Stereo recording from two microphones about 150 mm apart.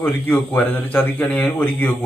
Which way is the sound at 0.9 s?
10° left (ahead or behind).